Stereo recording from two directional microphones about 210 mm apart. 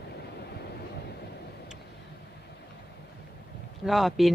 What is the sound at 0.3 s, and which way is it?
Vehicle, 50° left (ahead or behind).